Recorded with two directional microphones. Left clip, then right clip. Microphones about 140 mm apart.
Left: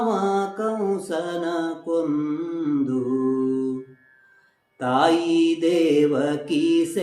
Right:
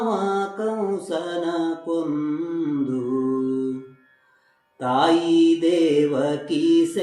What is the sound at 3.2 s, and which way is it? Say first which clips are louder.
Mantra: left 1 dB; 20° right (ahead or behind).